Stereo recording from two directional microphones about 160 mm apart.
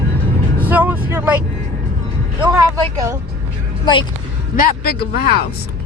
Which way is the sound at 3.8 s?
30° left (ahead or behind).